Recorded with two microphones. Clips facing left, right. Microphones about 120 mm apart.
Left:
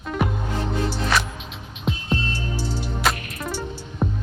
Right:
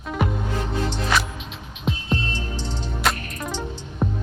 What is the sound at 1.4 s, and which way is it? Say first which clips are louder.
Music: even; centre (ahead or behind).